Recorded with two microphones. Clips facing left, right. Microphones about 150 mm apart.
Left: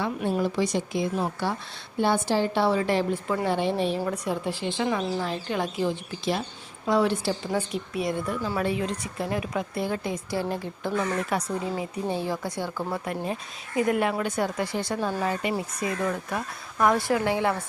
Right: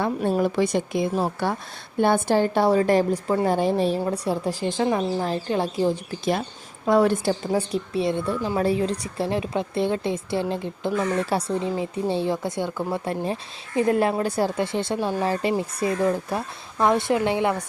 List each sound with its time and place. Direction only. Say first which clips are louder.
0.3 s a woman's voice: right 3 dB; 55° right (ahead or behind)
7.5 s a woman's voice: right 4 dB; 30° right (ahead or behind)